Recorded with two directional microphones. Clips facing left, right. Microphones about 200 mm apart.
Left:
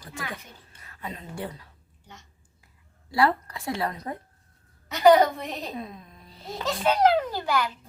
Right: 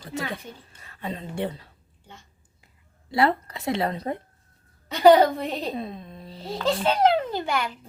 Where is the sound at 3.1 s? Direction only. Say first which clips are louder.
Right 1 dB; 25° right (ahead or behind).